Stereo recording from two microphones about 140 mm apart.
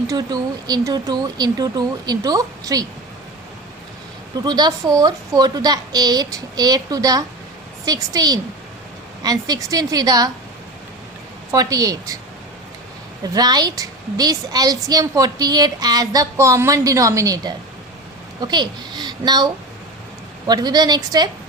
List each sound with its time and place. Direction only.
0.1 s a woman's voice: 25° right (ahead or behind)
4.4 s a woman's voice: 30° right (ahead or behind)
11.5 s a woman's voice: 25° right (ahead or behind)
13.2 s a woman's voice: 30° right (ahead or behind)
20.5 s a woman's voice: 30° right (ahead or behind)